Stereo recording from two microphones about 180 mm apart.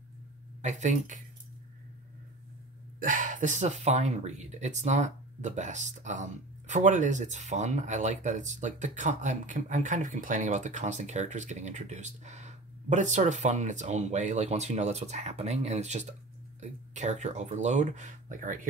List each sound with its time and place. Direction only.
0.6 s speech: 40° right (ahead or behind)
3.0 s speech: 45° right (ahead or behind)